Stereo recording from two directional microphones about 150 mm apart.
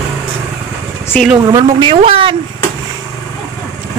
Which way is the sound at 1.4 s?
25° right (ahead or behind).